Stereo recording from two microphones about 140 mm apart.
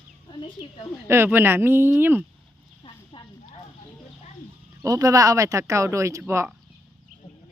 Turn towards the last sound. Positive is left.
turn(degrees=-20)  # may be behind; listen again after turning